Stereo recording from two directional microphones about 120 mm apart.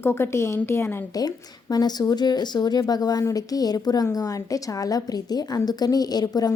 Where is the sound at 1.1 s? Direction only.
35° left (ahead or behind).